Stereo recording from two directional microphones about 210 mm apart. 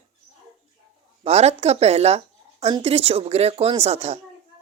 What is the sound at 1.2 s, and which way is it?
Speech, 30° right (ahead or behind).